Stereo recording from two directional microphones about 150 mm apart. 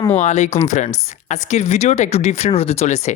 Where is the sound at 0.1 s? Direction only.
50° left (ahead or behind).